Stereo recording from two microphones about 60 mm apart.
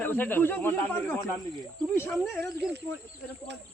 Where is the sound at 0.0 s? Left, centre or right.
Left.